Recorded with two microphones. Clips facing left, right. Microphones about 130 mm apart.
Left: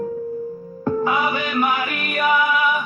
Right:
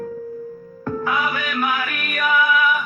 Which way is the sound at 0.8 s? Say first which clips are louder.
Left 3 dB; 20° left (ahead or behind).